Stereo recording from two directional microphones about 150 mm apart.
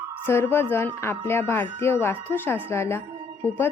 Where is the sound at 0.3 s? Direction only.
15° left (ahead or behind).